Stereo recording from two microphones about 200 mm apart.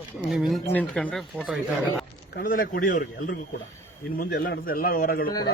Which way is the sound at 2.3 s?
45° left (ahead or behind).